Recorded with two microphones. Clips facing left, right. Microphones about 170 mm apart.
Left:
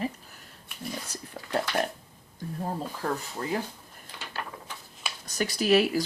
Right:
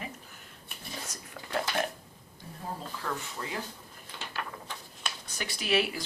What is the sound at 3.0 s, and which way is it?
Speech, 40° left (ahead or behind).